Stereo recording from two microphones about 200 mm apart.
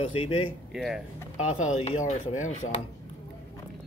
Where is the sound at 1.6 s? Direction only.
35° left (ahead or behind).